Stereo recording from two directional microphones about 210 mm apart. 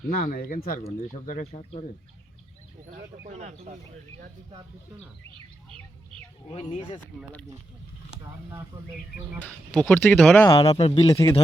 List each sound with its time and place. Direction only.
0.1 s speech: 45° left (ahead or behind)
3.2 s speech: 30° right (ahead or behind)
5.3 s bird: 25° right (ahead or behind)
6.5 s speech: 30° left (ahead or behind)
9.4 s speech: 5° left (ahead or behind)
10.4 s speech: 25° left (ahead or behind)
11.1 s speech: 15° left (ahead or behind)